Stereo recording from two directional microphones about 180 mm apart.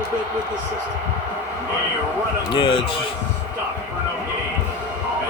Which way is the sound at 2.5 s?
25° left (ahead or behind).